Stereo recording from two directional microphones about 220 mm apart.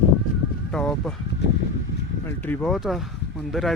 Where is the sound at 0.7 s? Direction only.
5° left (ahead or behind).